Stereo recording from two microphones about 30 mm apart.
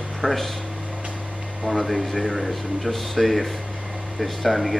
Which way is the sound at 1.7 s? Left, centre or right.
Centre.